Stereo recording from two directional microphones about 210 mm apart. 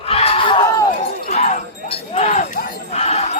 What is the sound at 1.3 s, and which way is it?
Jingle bell, 30° left (ahead or behind).